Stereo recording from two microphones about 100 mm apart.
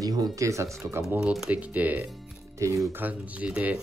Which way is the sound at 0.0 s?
40° right (ahead or behind).